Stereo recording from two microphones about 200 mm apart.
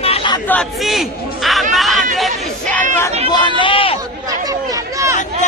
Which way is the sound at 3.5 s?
25° left (ahead or behind).